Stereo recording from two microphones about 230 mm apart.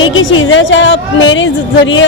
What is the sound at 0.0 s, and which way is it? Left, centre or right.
A woman's voice, left.